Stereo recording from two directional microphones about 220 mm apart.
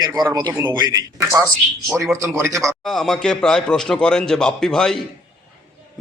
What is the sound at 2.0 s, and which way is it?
Speech, 15° right (ahead or behind).